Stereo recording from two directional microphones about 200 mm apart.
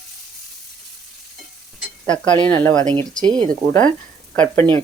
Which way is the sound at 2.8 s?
25° right (ahead or behind).